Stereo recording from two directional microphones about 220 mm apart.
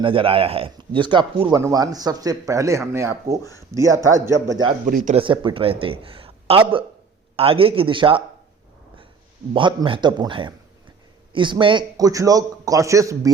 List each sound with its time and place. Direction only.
0.0 s speech: 25° right (ahead or behind)
4.9 s speech: 40° right (ahead or behind)
5.1 s speech: 20° right (ahead or behind)
9.5 s speech: 25° right (ahead or behind)